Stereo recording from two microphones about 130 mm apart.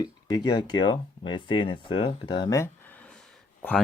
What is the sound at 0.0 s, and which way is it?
Speech, 30° left (ahead or behind).